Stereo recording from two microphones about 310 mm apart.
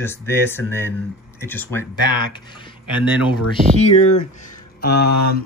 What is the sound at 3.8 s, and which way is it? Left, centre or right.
Speech, left.